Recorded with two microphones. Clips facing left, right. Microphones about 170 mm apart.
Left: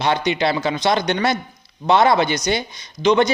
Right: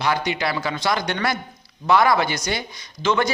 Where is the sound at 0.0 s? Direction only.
25° left (ahead or behind).